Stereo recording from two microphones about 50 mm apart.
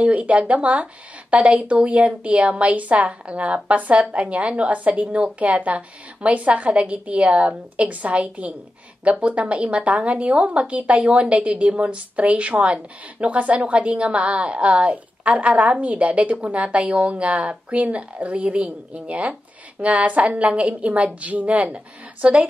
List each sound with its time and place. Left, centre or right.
0.0 s a woman's voice: right